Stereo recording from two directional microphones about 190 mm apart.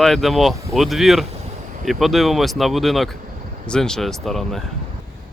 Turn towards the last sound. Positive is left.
turn(degrees=0)  # may be behind; listen again after turning